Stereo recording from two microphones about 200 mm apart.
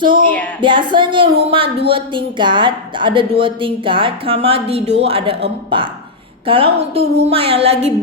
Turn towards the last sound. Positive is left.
turn(degrees=-30)  # may be behind; listen again after turning